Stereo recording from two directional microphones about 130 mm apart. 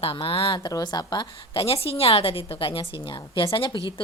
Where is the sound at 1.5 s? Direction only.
50° left (ahead or behind).